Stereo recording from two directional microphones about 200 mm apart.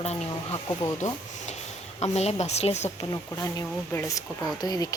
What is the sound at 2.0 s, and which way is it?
Speech, 30° left (ahead or behind).